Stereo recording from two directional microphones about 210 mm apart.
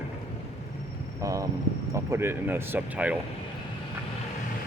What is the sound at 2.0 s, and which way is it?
Speech, 10° right (ahead or behind).